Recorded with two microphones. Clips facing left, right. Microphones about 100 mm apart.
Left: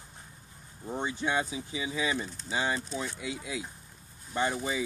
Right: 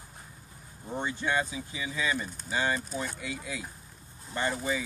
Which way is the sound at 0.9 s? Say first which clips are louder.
Right 1 dB; 20° left (ahead or behind).